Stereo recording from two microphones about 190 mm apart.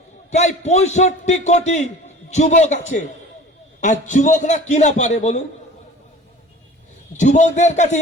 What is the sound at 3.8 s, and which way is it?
A man's voice, 40° left (ahead or behind).